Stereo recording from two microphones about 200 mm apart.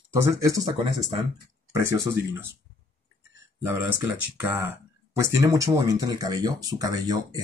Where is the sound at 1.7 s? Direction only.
15° right (ahead or behind).